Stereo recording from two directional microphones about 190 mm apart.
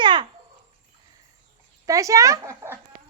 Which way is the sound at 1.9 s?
15° right (ahead or behind).